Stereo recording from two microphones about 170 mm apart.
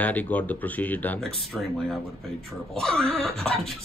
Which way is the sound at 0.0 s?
10° left (ahead or behind).